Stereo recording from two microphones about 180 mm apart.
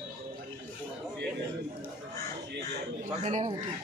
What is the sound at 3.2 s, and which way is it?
Speech, 40° right (ahead or behind).